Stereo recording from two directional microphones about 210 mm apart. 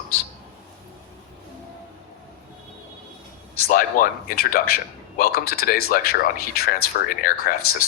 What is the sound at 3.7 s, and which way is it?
A man's voice, 45° left (ahead or behind).